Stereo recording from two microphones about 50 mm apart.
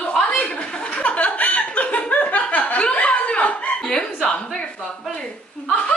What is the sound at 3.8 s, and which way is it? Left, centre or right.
Speech, centre.